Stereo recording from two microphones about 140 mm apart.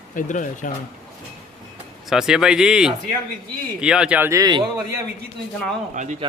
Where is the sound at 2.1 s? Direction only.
5° right (ahead or behind).